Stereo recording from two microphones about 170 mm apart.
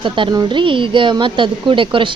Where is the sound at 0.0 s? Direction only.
30° right (ahead or behind).